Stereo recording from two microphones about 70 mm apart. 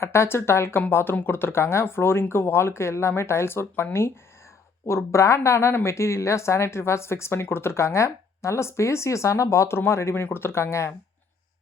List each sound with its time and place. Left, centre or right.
0.0 s speech: left
4.9 s speech: left